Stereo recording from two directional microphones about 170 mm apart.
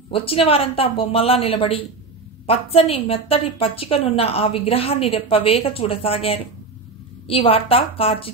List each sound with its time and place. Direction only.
0.1 s a woman's voice: 35° left (ahead or behind)